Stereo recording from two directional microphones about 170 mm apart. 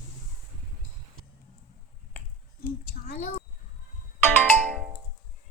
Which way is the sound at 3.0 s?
60° left (ahead or behind).